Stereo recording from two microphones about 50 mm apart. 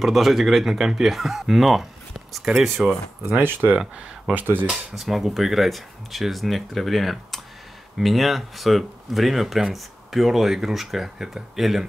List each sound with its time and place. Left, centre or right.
0.0 s speech: centre
4.3 s speech: right
5.0 s speech: centre